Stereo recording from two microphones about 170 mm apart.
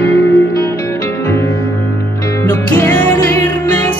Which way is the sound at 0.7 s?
15° left (ahead or behind).